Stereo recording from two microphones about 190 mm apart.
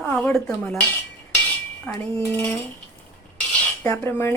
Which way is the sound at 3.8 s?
10° left (ahead or behind).